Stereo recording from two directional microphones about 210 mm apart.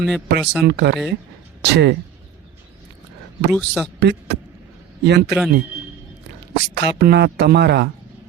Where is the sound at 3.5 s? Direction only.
Centre (ahead or behind).